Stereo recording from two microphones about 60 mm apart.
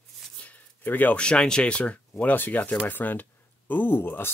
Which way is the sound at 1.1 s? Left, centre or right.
Centre.